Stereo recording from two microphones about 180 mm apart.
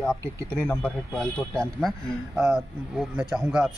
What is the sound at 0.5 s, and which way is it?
A man's voice, 5° left (ahead or behind).